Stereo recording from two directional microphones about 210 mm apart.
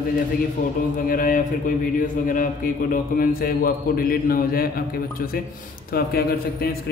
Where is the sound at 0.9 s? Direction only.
40° left (ahead or behind).